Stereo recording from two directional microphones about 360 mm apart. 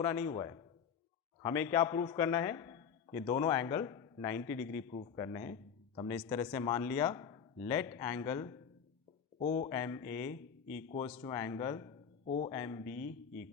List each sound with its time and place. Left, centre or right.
0.0 s a man's voice: centre